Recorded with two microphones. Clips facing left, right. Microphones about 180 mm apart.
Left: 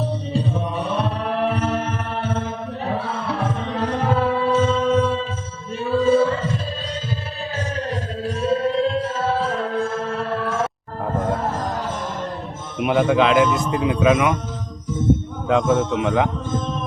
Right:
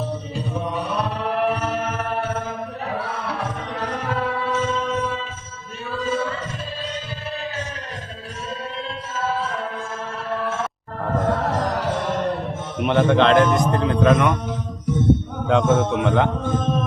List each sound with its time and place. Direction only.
1.5 s chant: 30° left (ahead or behind)
3.0 s music: 25° left (ahead or behind)
8.4 s music: 35° left (ahead or behind)
11.1 s music: 75° right (ahead or behind)
12.8 s a man's voice: 5° left (ahead or behind)
15.4 s a man's voice: centre (ahead or behind)
15.8 s a man's voice: 60° right (ahead or behind)
16.0 s a man's voice: 5° left (ahead or behind)